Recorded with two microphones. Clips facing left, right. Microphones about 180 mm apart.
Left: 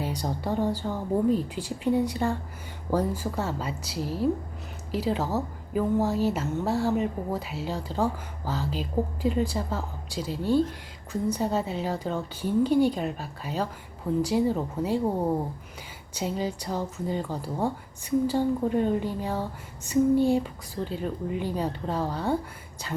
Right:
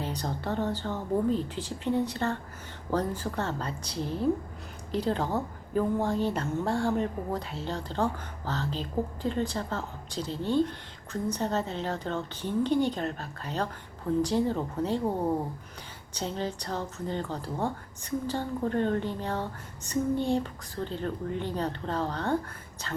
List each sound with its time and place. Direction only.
0.0 s a woman's voice: 10° left (ahead or behind)
16.1 s a woman's voice: 10° left (ahead or behind)